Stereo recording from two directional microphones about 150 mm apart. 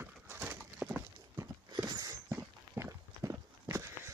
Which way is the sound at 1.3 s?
25° right (ahead or behind).